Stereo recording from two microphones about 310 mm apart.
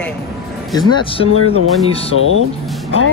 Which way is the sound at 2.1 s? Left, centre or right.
Left.